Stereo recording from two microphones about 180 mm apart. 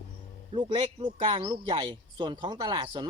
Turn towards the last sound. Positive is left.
turn(degrees=-25)  # may be behind; listen again after turning